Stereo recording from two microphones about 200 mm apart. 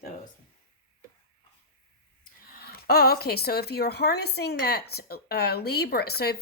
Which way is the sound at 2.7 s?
50° left (ahead or behind).